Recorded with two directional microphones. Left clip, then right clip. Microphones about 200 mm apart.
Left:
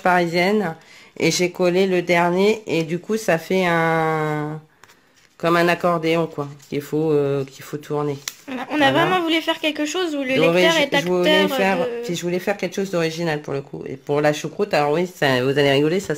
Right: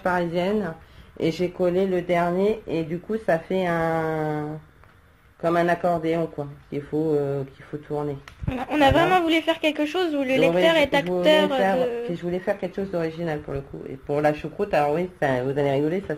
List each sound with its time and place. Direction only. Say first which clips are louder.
0.0 s speech: left 6 dB; 55° left (ahead or behind)
8.5 s a woman's voice: left 1 dB; centre (ahead or behind)
12.1 s speech: left 3 dB; 60° left (ahead or behind)